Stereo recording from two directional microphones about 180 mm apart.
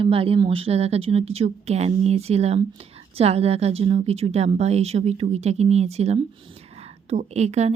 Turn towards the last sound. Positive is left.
turn(degrees=-40)  # may be behind; listen again after turning